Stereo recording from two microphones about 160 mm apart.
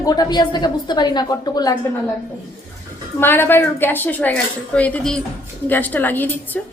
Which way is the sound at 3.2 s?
15° left (ahead or behind).